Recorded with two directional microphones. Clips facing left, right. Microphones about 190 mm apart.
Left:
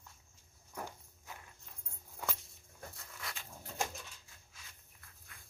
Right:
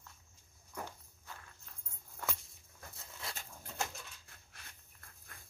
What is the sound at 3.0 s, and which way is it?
Dog, 25° right (ahead or behind).